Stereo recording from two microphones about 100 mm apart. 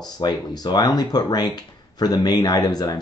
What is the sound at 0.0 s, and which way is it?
Speech, 40° left (ahead or behind).